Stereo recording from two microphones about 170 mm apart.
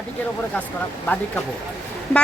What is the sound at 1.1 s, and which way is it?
Speech, 10° left (ahead or behind).